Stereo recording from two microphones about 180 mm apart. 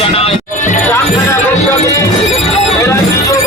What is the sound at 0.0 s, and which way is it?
Music, 35° left (ahead or behind).